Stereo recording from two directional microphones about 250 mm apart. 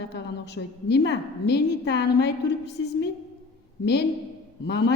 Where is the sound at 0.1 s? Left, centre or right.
Left.